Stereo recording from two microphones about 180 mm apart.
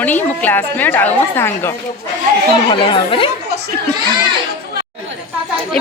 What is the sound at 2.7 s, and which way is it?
Speech, 30° left (ahead or behind).